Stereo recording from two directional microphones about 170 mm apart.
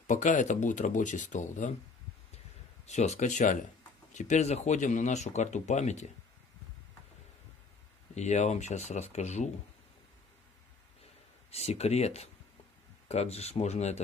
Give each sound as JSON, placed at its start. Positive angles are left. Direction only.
{"t": 0.0, "sound": "speech", "side_deg": 50}
{"t": 2.8, "sound": "speech", "side_deg": 40}
{"t": 8.1, "sound": "speech", "side_deg": 40}
{"t": 11.5, "sound": "speech", "side_deg": 40}